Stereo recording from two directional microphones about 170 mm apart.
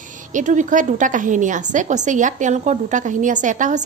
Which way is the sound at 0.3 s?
45° right (ahead or behind).